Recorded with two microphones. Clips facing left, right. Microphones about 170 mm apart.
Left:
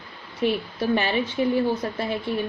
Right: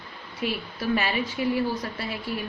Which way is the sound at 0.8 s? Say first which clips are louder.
Left 2 dB; 30° left (ahead or behind).